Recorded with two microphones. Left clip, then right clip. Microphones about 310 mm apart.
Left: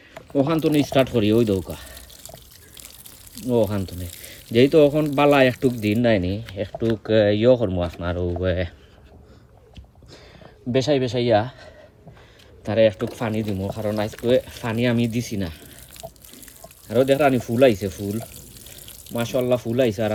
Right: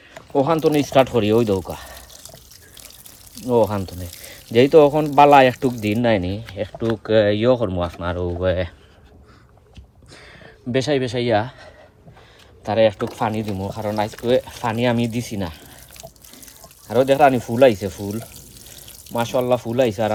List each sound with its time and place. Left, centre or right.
0.1 s a sound: centre
0.8 s speech: centre
3.3 s speech: centre
10.1 s a sound: right
12.6 s speech: centre
18.7 s pour: centre
19.7 s speech: centre